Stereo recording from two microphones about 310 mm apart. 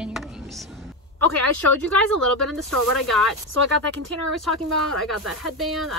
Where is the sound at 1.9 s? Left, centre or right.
Centre.